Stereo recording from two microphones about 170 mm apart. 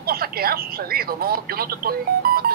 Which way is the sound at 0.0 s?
60° right (ahead or behind).